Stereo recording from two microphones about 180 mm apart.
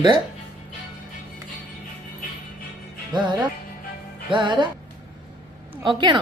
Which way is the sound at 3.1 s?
25° right (ahead or behind).